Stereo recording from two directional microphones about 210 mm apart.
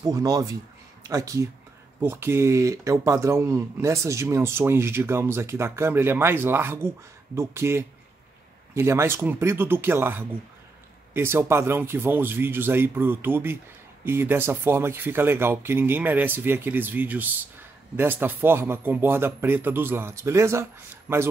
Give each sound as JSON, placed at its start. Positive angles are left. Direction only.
{"t": 0.0, "sound": "speech", "side_deg": -15}